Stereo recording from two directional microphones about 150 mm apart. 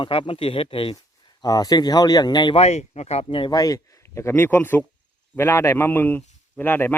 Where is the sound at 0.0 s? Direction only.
35° left (ahead or behind).